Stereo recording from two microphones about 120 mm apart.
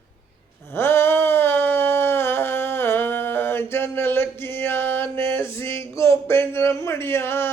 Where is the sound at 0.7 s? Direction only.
20° left (ahead or behind).